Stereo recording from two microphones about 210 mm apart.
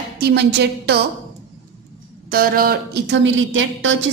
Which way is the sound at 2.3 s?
45° right (ahead or behind).